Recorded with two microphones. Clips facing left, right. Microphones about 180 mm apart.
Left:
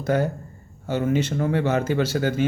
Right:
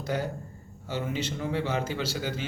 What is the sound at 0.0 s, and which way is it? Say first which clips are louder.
A man's voice: left 8 dB; 50° left (ahead or behind).